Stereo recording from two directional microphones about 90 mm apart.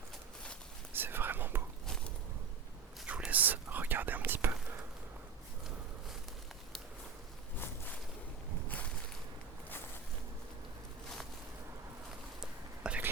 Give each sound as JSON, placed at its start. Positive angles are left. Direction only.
{"t": 0.9, "sound": "whispering", "side_deg": -25}
{"t": 3.1, "sound": "whispering", "side_deg": -15}
{"t": 12.4, "sound": "a sound", "side_deg": -10}